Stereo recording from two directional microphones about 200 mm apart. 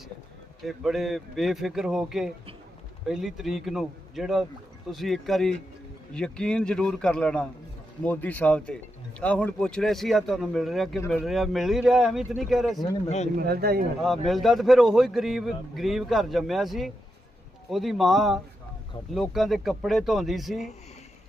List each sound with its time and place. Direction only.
0.6 s a man's voice: centre (ahead or behind)
13.3 s a man's voice: 50° right (ahead or behind)
14.3 s a man's voice: centre (ahead or behind)